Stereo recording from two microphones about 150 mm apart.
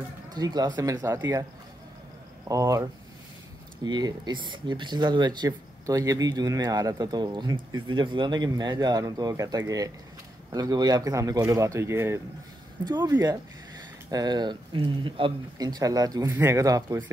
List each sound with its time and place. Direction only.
0.3 s speech: 25° right (ahead or behind)
2.4 s speech: 20° right (ahead or behind)
3.8 s speech: 30° right (ahead or behind)
12.8 s speech: 30° right (ahead or behind)
14.1 s speech: 25° right (ahead or behind)